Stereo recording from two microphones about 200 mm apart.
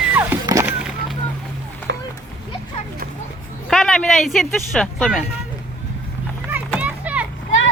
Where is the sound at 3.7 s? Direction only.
Centre (ahead or behind).